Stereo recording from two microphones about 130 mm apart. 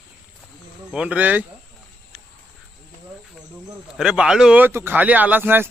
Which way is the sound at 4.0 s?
5° right (ahead or behind).